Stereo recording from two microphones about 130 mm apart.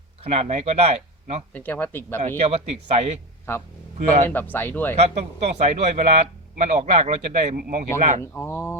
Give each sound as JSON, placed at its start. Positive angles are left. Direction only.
{"t": 0.3, "sound": "a man's voice", "side_deg": -55}
{"t": 1.5, "sound": "speech", "side_deg": 15}
{"t": 2.4, "sound": "a man's voice", "side_deg": -55}
{"t": 3.5, "sound": "speech", "side_deg": 20}
{"t": 3.9, "sound": "speech", "side_deg": -70}
{"t": 4.3, "sound": "speech", "side_deg": 15}
{"t": 4.9, "sound": "a man's voice", "side_deg": -55}
{"t": 8.2, "sound": "speech", "side_deg": 20}